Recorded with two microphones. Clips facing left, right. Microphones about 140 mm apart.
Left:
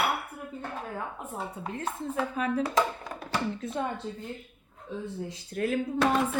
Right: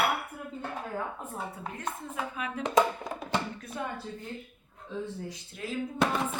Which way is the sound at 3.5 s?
25° left (ahead or behind).